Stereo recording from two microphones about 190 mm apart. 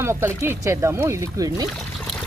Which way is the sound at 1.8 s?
Centre (ahead or behind).